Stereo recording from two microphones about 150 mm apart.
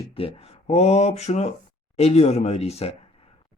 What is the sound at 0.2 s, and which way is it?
Speech, 40° left (ahead or behind).